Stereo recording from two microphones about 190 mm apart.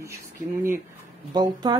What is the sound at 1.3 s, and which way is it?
Speech, 20° right (ahead or behind).